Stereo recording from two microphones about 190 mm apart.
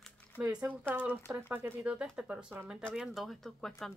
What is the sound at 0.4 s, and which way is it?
Speech, 5° right (ahead or behind).